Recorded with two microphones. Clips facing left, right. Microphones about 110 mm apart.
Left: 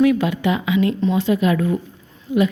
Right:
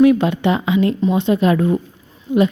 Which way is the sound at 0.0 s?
30° right (ahead or behind).